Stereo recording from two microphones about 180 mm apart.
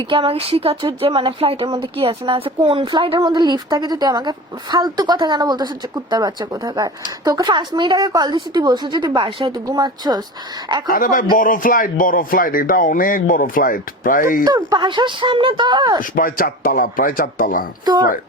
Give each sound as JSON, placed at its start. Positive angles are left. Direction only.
{"t": 0.1, "sound": "a woman's voice", "side_deg": -30}
{"t": 10.8, "sound": "speech", "side_deg": 50}
{"t": 14.4, "sound": "a woman's voice", "side_deg": -20}
{"t": 16.0, "sound": "speech", "side_deg": 50}
{"t": 17.8, "sound": "a woman's voice", "side_deg": -25}